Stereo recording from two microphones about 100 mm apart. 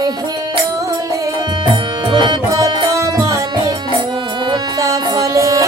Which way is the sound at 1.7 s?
50° right (ahead or behind).